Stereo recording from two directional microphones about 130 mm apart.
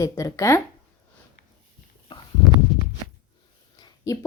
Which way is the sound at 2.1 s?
35° left (ahead or behind).